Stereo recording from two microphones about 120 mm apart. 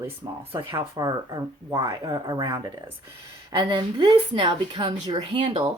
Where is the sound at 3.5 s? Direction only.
40° right (ahead or behind).